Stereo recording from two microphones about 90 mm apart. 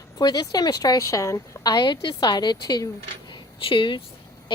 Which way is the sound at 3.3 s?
70° left (ahead or behind).